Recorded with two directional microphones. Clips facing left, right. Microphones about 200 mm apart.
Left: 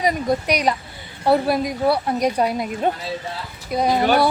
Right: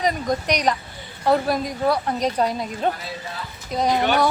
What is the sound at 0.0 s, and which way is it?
Speech, 10° left (ahead or behind).